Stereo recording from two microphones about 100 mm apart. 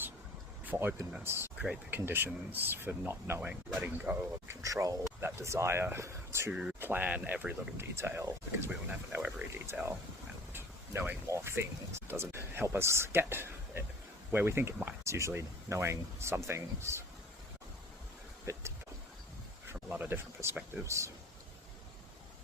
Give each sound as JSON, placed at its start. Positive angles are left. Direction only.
{"t": 0.6, "sound": "speech", "side_deg": -20}
{"t": 1.5, "sound": "speech", "side_deg": -10}
{"t": 1.9, "sound": "speech", "side_deg": -20}
{"t": 6.5, "sound": "speech", "side_deg": -10}
{"t": 7.8, "sound": "speech", "side_deg": -25}
{"t": 8.9, "sound": "speech", "side_deg": -15}
{"t": 9.7, "sound": "speech", "side_deg": -25}
{"t": 11.3, "sound": "speech", "side_deg": -25}
{"t": 18.5, "sound": "speech", "side_deg": -30}
{"t": 19.6, "sound": "speech", "side_deg": -20}